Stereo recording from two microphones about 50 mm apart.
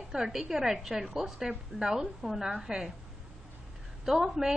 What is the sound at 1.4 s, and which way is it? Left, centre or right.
A woman's voice, centre.